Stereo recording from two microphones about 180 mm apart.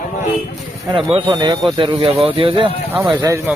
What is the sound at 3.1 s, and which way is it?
Speech, 15° right (ahead or behind).